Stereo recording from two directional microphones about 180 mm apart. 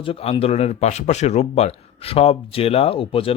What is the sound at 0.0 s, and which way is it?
Speech, 30° left (ahead or behind).